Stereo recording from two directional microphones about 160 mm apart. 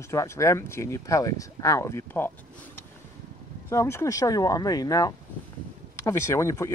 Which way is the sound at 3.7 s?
15° left (ahead or behind).